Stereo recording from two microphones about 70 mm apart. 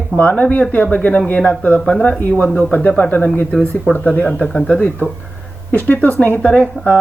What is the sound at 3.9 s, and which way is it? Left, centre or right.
Speech, left.